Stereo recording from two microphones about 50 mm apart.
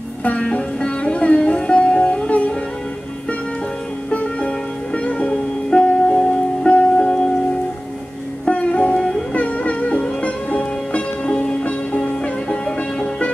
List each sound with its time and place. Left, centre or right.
0.2 s sitar: left
4.1 s music: left
5.3 s music: centre
8.5 s music: left
12.0 s music: centre